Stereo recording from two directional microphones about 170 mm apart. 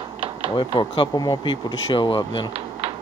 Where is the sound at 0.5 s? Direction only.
30° left (ahead or behind).